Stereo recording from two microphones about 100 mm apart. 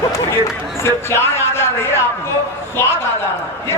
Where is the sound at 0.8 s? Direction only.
25° left (ahead or behind).